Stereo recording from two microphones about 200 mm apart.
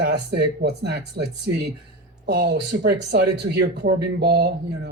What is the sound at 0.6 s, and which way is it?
Speech, 55° right (ahead or behind).